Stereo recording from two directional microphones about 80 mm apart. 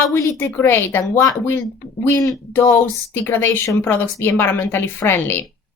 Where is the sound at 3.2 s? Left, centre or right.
Left.